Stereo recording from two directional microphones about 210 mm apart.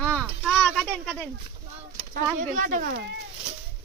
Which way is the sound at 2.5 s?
40° right (ahead or behind).